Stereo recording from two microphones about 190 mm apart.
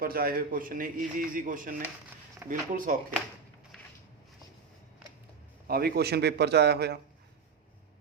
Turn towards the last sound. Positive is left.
turn(degrees=-60)  # may be behind; listen again after turning